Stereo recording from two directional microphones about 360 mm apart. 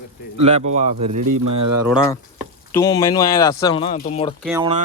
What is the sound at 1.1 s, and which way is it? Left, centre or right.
Speech, right.